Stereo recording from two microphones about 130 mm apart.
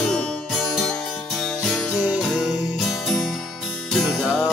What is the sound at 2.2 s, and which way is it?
Music, centre (ahead or behind).